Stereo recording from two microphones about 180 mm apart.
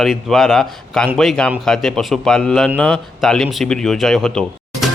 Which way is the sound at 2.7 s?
5° left (ahead or behind).